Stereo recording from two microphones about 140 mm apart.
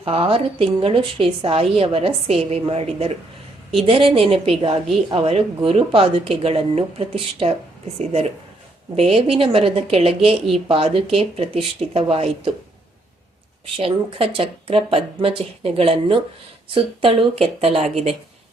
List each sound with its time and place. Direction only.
0.0 s a woman's voice: 40° right (ahead or behind)
13.7 s speech: 45° right (ahead or behind)